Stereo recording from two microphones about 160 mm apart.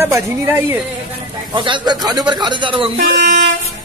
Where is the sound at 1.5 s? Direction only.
30° right (ahead or behind).